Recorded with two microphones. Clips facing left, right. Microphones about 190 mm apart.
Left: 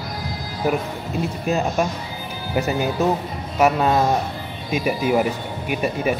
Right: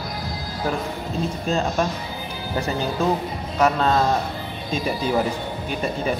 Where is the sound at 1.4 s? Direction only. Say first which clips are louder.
Left 2 dB; 15° left (ahead or behind).